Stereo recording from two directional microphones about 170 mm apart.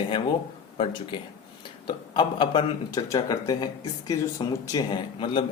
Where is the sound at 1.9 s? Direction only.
30° left (ahead or behind).